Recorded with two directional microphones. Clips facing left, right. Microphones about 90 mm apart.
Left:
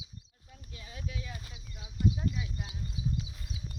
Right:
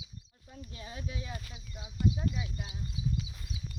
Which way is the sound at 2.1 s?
10° right (ahead or behind).